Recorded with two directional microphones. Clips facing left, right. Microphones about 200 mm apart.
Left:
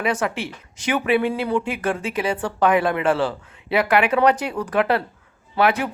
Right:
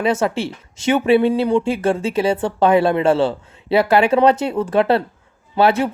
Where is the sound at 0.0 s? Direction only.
25° right (ahead or behind).